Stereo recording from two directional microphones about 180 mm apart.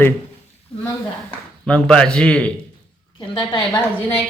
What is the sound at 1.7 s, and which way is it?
Speech, 5° left (ahead or behind).